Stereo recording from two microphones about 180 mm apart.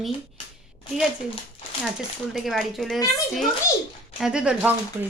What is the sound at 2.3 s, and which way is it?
Speech, centre (ahead or behind).